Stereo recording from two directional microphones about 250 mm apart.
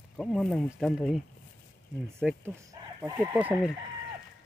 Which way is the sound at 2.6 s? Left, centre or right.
Centre.